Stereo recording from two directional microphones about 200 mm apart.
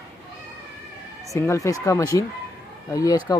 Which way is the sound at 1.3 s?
15° left (ahead or behind).